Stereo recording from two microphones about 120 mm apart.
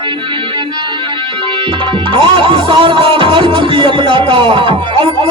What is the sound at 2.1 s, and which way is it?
Music, 45° right (ahead or behind).